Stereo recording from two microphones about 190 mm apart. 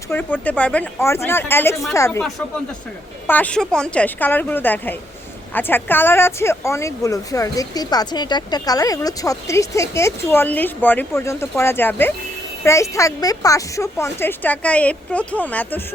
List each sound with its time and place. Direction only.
0.1 s speech: 10° left (ahead or behind)
3.2 s speech: 10° left (ahead or behind)